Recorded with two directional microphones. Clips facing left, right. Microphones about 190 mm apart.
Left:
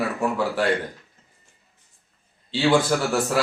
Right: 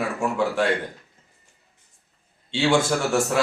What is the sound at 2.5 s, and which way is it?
Speech, 5° left (ahead or behind).